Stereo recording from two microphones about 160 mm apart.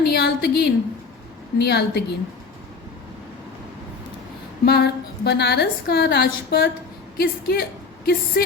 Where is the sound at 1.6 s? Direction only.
90° left.